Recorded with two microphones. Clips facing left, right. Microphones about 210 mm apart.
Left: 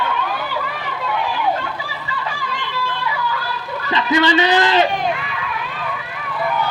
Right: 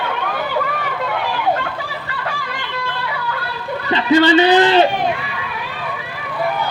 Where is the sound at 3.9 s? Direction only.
30° right (ahead or behind).